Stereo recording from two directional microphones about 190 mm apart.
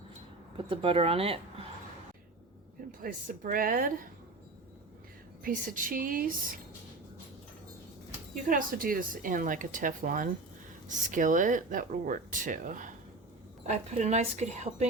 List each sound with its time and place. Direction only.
0.5 s speech: 30° right (ahead or behind)
3.0 s speech: 45° right (ahead or behind)
5.4 s speech: 45° right (ahead or behind)
8.4 s speech: 45° right (ahead or behind)